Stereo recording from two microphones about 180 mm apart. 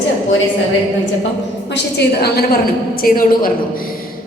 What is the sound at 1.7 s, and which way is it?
A woman's voice, 65° left (ahead or behind).